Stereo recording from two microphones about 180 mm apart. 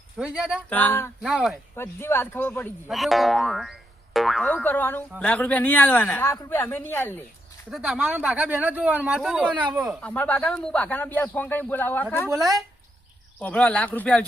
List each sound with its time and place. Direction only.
0.2 s speech: 5° right (ahead or behind)
0.7 s speech: 10° left (ahead or behind)
1.2 s speech: 5° right (ahead or behind)
1.7 s speech: 15° left (ahead or behind)
2.9 s speech: centre (ahead or behind)
7.7 s speech: centre (ahead or behind)
10.0 s speech: 10° left (ahead or behind)
12.3 s speech: 20° right (ahead or behind)
13.4 s speech: 10° left (ahead or behind)